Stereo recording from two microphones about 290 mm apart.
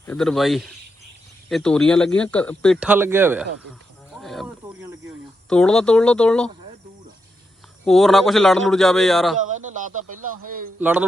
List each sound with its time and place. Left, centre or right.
0.0 s speech: centre
4.2 s cricket: centre
5.5 s speech: centre
7.9 s speech: centre
9.5 s a sound: right
10.4 s a man's voice: right
10.8 s speech: centre